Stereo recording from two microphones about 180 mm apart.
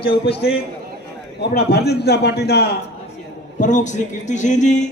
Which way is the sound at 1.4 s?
65° left (ahead or behind).